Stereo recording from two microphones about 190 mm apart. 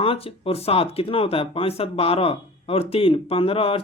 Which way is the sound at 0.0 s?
30° left (ahead or behind).